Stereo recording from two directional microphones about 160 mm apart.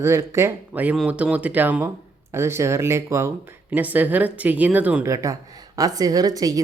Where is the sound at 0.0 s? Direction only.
15° right (ahead or behind).